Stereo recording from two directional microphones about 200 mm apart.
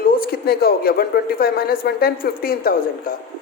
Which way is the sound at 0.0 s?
50° left (ahead or behind).